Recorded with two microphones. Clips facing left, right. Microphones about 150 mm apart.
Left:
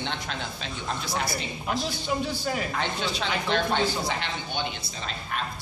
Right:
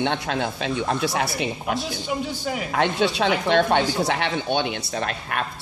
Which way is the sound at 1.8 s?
15° right (ahead or behind).